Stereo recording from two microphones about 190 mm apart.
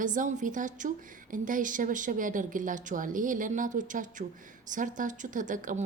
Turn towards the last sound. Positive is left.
turn(degrees=-45)  # may be behind; listen again after turning